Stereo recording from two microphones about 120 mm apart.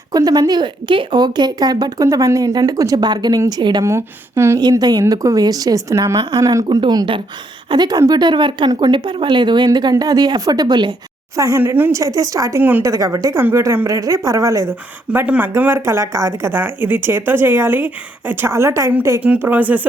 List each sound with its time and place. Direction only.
0.1 s speech: 35° right (ahead or behind)
3.8 s a woman's voice: 20° right (ahead or behind)
4.8 s a woman's voice: 35° right (ahead or behind)
11.3 s a woman's voice: 25° right (ahead or behind)